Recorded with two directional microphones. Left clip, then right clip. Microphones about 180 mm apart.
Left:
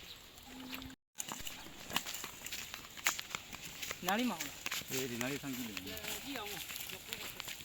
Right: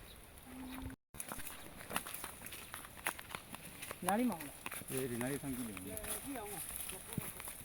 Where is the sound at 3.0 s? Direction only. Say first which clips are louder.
Left 6 dB; 25° right (ahead or behind).